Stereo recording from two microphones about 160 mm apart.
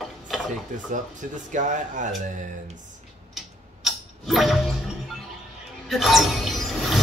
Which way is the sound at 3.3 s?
Centre (ahead or behind).